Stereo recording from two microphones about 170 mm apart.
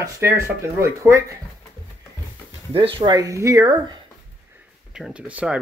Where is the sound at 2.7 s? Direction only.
30° right (ahead or behind).